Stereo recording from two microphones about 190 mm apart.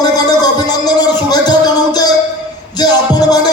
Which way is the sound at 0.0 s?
20° left (ahead or behind).